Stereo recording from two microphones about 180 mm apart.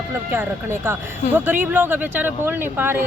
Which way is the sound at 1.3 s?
10° right (ahead or behind).